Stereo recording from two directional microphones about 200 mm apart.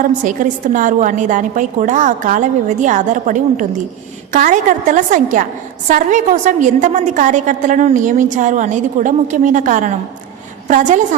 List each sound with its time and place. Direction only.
0.3 s a woman's voice: 40° right (ahead or behind)